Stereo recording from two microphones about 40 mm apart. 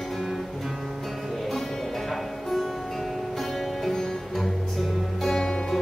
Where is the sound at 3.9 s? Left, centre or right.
Centre.